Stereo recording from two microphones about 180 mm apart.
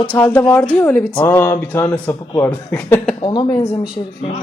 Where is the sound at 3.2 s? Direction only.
25° left (ahead or behind).